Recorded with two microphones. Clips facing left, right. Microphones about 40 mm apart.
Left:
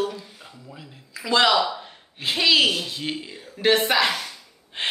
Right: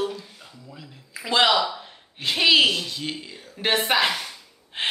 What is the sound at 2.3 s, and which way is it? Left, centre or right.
Speech, centre.